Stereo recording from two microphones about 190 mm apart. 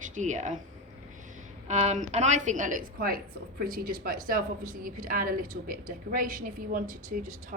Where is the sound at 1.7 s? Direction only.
35° right (ahead or behind).